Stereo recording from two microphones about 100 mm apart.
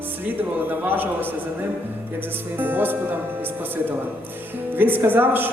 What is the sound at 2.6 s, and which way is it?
Speech, 20° right (ahead or behind).